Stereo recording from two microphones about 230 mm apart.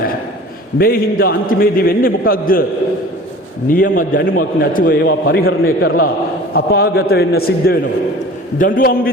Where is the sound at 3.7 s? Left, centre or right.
Left.